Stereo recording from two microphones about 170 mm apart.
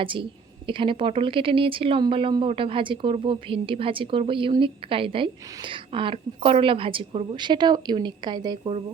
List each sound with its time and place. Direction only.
0.0 s a woman's voice: 30° right (ahead or behind)